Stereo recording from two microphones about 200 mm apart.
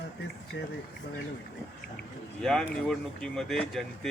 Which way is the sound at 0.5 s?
60° left (ahead or behind).